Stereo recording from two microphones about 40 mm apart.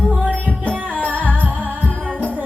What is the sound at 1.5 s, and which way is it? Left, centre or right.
Music, right.